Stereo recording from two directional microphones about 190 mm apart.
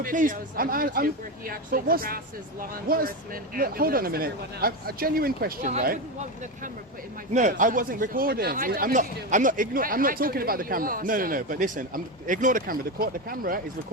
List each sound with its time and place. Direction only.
0.0 s speech: 45° right (ahead or behind)
7.3 s speech: 40° right (ahead or behind)